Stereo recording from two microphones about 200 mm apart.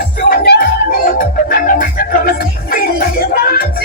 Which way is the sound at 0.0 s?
45° left (ahead or behind).